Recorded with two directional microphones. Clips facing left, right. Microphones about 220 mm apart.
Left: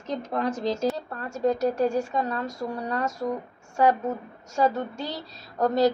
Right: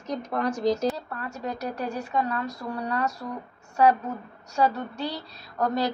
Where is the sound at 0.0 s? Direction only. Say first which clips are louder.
Even; 25° left (ahead or behind).